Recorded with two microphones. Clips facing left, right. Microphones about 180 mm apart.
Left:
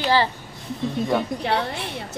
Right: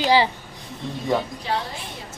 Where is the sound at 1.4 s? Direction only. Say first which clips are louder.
Left 4 dB; 70° left (ahead or behind).